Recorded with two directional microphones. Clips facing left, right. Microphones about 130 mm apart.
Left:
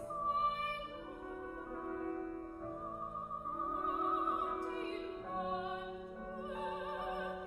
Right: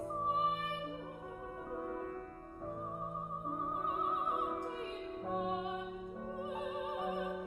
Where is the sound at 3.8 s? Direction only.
20° right (ahead or behind).